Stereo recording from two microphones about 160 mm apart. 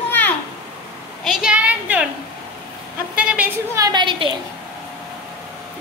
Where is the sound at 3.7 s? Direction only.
25° right (ahead or behind).